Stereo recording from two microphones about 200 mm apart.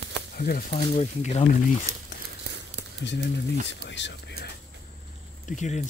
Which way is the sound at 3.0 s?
60° left (ahead or behind).